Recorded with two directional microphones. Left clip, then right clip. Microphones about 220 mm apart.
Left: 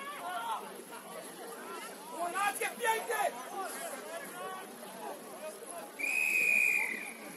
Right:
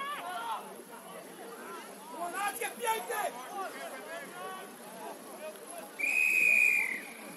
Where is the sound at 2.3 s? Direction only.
15° left (ahead or behind).